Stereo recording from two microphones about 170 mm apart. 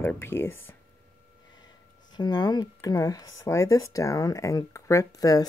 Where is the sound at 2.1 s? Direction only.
25° left (ahead or behind).